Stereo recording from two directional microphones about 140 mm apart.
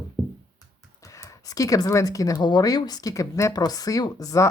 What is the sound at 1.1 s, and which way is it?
Speech, 25° left (ahead or behind).